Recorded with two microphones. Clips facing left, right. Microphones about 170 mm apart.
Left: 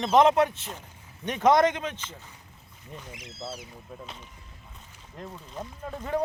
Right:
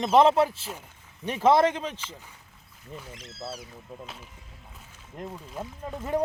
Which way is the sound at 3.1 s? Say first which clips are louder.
Even; 15° left (ahead or behind).